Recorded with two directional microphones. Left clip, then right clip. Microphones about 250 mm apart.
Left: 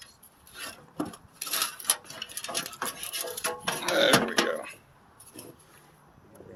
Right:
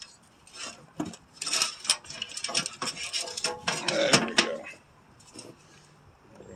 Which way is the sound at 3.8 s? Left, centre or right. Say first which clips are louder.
Left 4 dB; left.